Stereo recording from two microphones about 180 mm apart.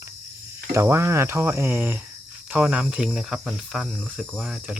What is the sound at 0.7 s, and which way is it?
Speech, 15° right (ahead or behind).